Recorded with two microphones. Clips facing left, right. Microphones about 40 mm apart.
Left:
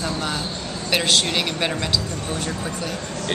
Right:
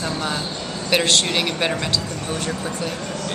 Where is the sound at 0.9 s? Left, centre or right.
Centre.